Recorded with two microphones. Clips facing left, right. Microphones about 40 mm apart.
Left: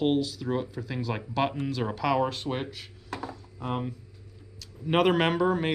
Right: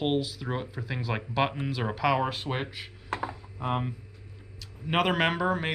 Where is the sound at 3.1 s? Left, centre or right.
Right.